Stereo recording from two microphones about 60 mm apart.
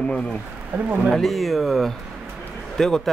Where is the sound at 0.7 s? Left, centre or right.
Right.